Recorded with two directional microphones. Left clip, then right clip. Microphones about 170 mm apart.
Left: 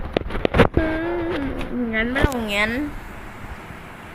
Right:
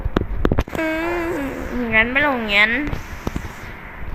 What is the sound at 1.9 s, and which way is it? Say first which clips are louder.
Speech: right 7 dB; 90° right.